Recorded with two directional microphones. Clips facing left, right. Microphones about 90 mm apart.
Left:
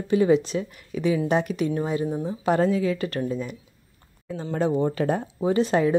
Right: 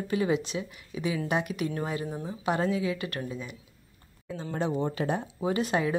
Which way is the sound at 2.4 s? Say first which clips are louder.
Left 6 dB; 40° left (ahead or behind).